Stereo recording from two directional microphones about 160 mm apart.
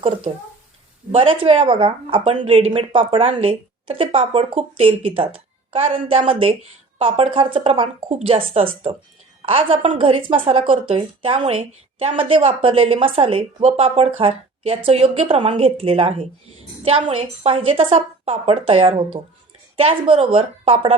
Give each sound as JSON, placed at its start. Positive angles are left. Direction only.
{"t": 0.3, "sound": "a woman's voice", "side_deg": -40}